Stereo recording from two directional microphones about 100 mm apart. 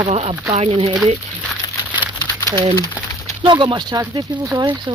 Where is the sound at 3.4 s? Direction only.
50° right (ahead or behind).